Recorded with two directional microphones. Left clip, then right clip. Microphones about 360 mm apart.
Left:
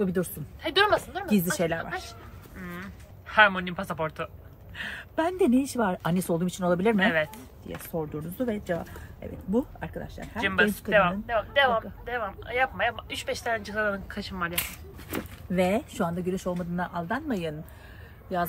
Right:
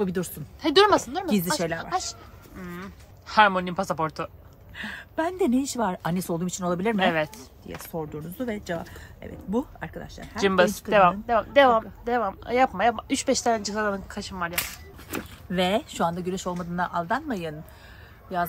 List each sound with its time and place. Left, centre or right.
0.0 s speech: centre
2.6 s speech: centre
4.7 s speech: centre